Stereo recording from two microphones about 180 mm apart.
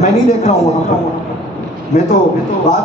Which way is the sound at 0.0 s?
40° left (ahead or behind).